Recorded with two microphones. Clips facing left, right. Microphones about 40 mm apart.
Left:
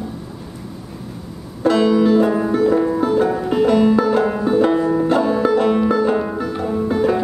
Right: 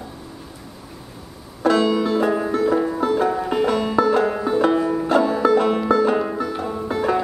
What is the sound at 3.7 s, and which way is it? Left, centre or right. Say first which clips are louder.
Banjo: left 5 dB; centre.